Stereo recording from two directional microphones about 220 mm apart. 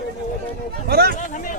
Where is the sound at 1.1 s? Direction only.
35° left (ahead or behind).